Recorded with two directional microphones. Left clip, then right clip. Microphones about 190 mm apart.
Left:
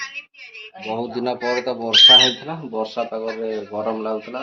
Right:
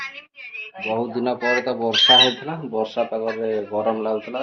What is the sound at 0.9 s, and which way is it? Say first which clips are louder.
Speech: right 1 dB; centre (ahead or behind).